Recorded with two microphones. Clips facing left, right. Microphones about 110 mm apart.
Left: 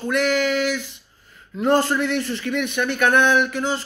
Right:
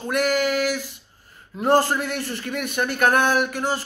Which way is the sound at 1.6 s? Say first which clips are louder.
Even; 40° right (ahead or behind).